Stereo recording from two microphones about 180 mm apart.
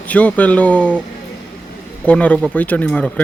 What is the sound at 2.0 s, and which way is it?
Speech, 5° left (ahead or behind).